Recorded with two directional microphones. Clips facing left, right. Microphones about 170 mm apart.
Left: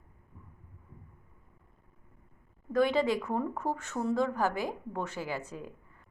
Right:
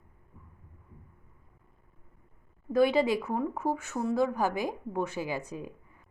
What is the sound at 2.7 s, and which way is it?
A woman's voice, 10° right (ahead or behind).